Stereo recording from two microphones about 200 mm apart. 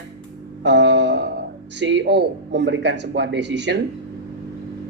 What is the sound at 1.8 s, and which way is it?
Speech, 60° right (ahead or behind).